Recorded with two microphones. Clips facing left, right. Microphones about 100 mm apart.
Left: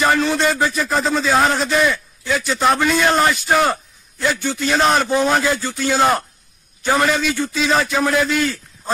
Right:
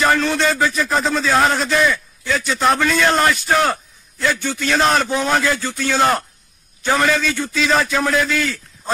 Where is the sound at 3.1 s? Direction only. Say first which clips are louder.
Even; centre (ahead or behind).